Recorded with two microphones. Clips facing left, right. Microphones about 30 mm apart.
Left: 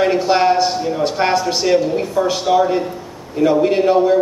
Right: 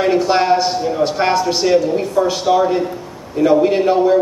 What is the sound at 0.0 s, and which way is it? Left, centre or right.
A man's voice, centre.